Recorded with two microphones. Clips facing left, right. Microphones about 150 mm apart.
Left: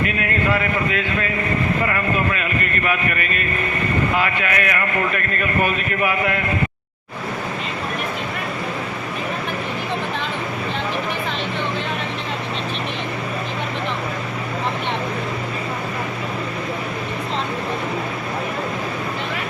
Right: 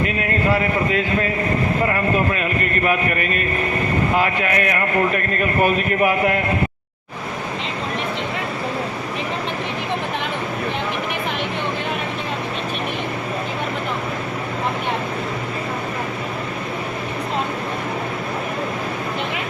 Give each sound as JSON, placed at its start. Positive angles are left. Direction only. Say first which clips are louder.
{"t": 0.5, "sound": "a man's voice", "louder": "right 2 dB", "side_deg": -35}